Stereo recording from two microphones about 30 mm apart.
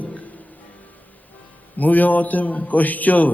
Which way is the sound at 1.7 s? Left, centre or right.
Left.